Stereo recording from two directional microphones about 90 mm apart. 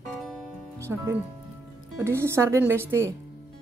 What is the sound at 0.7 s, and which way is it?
Music, 30° right (ahead or behind).